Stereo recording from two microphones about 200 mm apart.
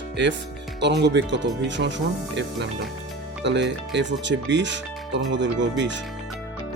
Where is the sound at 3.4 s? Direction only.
60° right (ahead or behind).